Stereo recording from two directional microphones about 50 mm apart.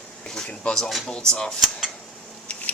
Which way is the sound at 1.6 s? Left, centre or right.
Centre.